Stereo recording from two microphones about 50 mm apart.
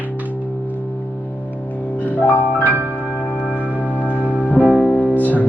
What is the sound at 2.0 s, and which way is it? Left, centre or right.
Music, left.